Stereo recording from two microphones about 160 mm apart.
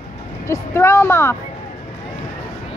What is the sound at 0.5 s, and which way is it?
Speech, 15° left (ahead or behind).